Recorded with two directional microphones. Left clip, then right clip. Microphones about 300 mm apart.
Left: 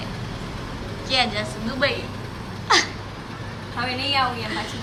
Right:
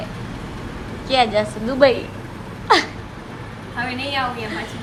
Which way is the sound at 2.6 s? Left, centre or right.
Centre.